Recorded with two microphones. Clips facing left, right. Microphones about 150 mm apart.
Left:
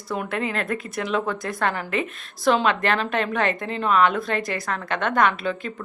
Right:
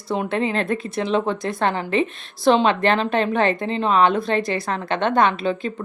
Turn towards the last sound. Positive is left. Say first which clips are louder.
# right 4 dB
turn(degrees=-25)  # may be behind; listen again after turning